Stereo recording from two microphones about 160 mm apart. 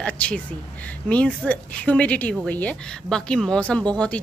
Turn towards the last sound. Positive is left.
turn(degrees=5)  # may be behind; listen again after turning